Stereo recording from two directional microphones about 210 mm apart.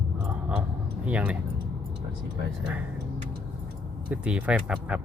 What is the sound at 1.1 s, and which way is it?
Speech, 5° right (ahead or behind).